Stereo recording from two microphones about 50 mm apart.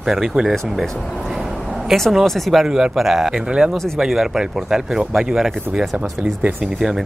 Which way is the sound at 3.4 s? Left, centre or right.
Centre.